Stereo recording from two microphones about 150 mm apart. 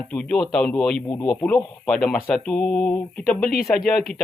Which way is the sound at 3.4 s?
85° left.